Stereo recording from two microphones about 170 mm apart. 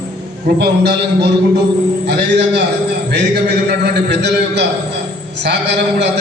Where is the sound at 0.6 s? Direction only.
85° right.